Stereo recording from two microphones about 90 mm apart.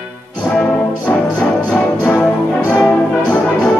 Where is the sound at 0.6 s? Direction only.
15° left (ahead or behind).